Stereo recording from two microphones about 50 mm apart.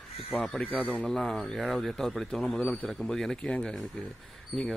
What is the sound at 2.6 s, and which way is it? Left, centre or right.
Speech, left.